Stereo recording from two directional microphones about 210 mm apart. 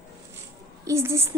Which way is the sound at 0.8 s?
15° right (ahead or behind).